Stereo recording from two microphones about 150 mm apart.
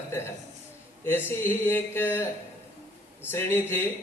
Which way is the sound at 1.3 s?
15° left (ahead or behind).